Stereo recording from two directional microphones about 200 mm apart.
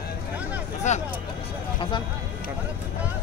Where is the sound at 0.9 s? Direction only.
35° left (ahead or behind).